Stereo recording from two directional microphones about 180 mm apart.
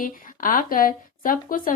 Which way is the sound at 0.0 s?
50° left (ahead or behind).